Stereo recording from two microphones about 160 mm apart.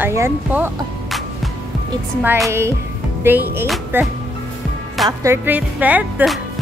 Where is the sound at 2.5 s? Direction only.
15° right (ahead or behind).